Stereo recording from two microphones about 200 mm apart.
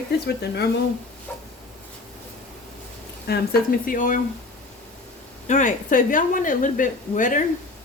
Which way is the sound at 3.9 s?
40° left (ahead or behind).